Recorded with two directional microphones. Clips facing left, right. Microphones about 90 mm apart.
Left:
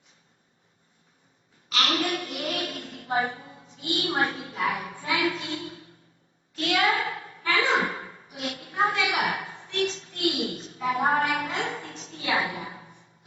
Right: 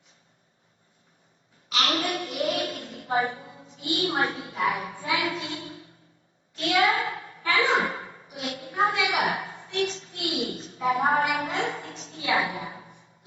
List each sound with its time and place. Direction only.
1.7 s a sound: 30° right (ahead or behind)
3.8 s a woman's voice: 35° right (ahead or behind)
4.3 s a child's voice: 25° right (ahead or behind)
6.6 s a child's voice: 25° right (ahead or behind)
7.7 s a sound: 35° right (ahead or behind)
8.9 s a woman's voice: 30° right (ahead or behind)